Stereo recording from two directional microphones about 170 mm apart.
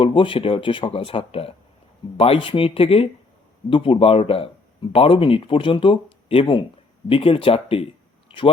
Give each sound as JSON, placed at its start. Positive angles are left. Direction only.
{"t": 0.0, "sound": "speech", "side_deg": 30}